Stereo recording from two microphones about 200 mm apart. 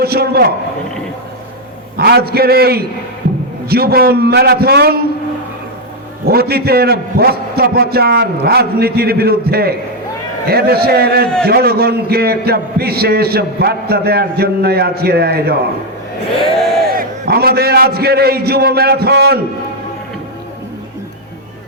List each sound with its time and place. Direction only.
0.0 s a man's voice: 50° right (ahead or behind)
2.0 s a man's voice: 55° right (ahead or behind)
6.2 s a man's voice: 50° right (ahead or behind)
16.6 s a sound: centre (ahead or behind)
16.9 s a man's voice: 50° right (ahead or behind)